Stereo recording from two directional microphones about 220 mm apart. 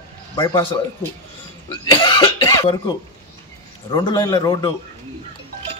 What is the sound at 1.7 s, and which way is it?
Speech, 20° left (ahead or behind).